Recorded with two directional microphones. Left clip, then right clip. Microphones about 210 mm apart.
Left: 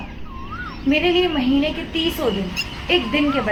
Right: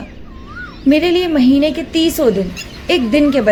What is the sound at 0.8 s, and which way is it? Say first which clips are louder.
A woman's voice: right 5 dB; 55° right (ahead or behind).